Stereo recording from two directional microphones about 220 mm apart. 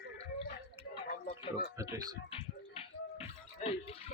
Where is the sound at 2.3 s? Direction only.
25° left (ahead or behind).